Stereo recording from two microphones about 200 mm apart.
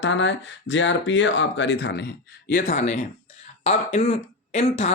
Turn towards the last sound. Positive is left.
turn(degrees=35)  # may be behind; listen again after turning